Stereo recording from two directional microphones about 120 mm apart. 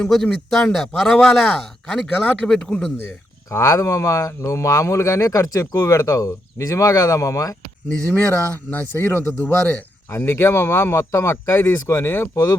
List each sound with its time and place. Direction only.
0.0 s speech: centre (ahead or behind)
3.5 s speech: 25° left (ahead or behind)
8.0 s speech: 15° left (ahead or behind)